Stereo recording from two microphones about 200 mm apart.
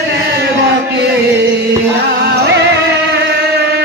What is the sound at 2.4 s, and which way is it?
Music, 60° right (ahead or behind).